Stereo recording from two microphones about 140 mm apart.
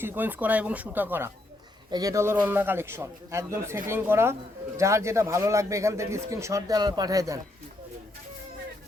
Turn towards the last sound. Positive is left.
turn(degrees=-25)  # may be behind; listen again after turning